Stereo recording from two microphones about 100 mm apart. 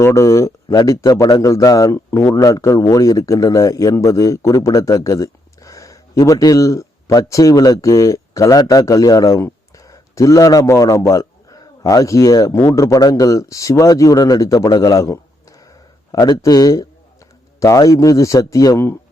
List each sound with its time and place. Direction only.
0.0 s a man's voice: 30° left (ahead or behind)